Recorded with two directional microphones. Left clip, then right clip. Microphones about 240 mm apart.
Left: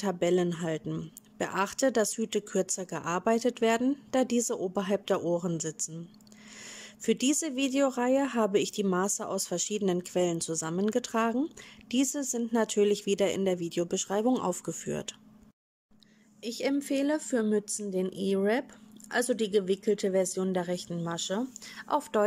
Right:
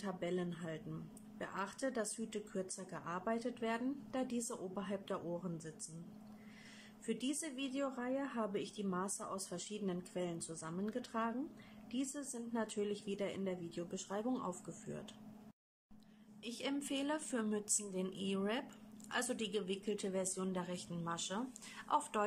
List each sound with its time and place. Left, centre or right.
0.0 s speech: left
7.1 s speech: left
16.4 s a woman's voice: centre